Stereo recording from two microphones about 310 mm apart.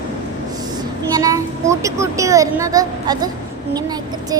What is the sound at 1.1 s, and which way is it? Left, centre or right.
A child's voice, centre.